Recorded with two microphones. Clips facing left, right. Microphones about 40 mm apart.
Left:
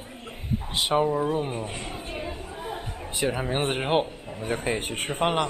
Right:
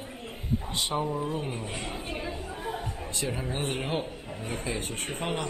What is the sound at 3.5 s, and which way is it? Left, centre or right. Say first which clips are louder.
Speech: left 8 dB; left.